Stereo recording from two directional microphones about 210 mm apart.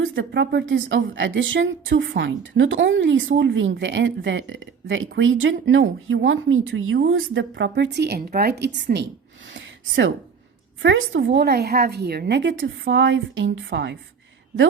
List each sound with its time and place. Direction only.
0.0 s a woman's voice: 60° right (ahead or behind)
9.6 s a sound: 60° right (ahead or behind)
10.8 s a woman's voice: 65° right (ahead or behind)